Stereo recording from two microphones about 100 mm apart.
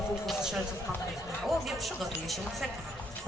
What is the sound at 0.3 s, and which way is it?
Speech, 5° right (ahead or behind).